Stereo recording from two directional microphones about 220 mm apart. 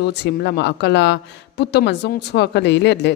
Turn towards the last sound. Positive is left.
turn(degrees=50)  # may be behind; listen again after turning